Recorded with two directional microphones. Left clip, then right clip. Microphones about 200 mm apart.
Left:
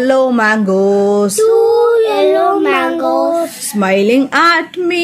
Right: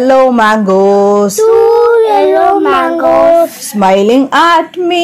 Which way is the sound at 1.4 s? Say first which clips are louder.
Right 3 dB; 20° left (ahead or behind).